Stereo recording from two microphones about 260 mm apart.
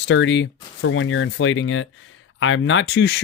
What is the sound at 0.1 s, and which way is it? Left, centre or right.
Speech, left.